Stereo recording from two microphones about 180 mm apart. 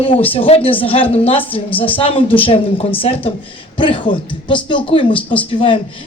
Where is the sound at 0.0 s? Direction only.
30° left (ahead or behind).